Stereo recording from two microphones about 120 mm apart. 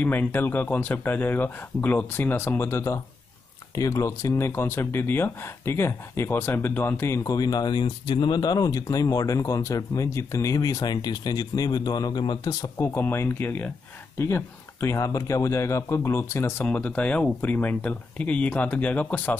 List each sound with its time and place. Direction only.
0.0 s speech: 15° left (ahead or behind)